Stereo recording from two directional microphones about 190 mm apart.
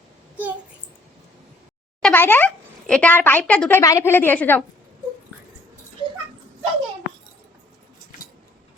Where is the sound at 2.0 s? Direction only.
10° left (ahead or behind).